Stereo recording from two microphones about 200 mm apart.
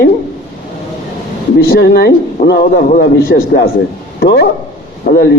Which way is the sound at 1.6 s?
50° left (ahead or behind).